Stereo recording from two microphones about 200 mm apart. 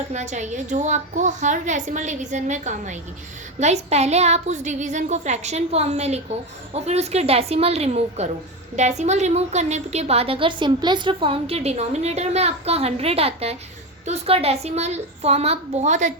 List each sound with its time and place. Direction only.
0.1 s a woman's voice: 35° right (ahead or behind)